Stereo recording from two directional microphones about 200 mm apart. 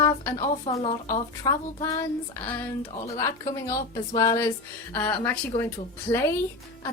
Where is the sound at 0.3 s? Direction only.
30° left (ahead or behind).